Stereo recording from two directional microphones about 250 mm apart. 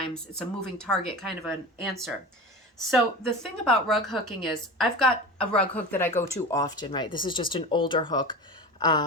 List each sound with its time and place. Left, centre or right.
0.1 s a woman's voice: centre